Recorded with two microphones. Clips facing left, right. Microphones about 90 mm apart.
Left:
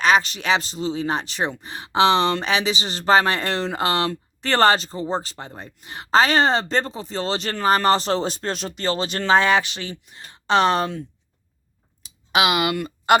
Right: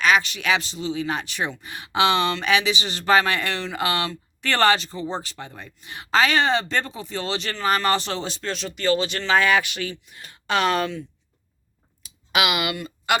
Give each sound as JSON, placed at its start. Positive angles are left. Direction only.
{"t": 0.0, "sound": "speech", "side_deg": 35}
{"t": 12.0, "sound": "a sound", "side_deg": 30}
{"t": 12.7, "sound": "speech", "side_deg": 50}